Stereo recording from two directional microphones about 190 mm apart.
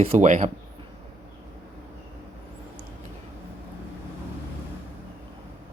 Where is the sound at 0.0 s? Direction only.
35° right (ahead or behind).